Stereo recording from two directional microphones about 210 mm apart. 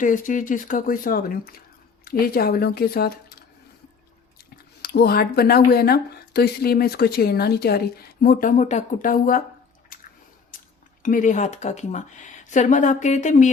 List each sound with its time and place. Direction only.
0.0 s speech: 40° left (ahead or behind)
4.4 s speech: 50° left (ahead or behind)
10.5 s a sound: 40° left (ahead or behind)
11.0 s speech: 40° left (ahead or behind)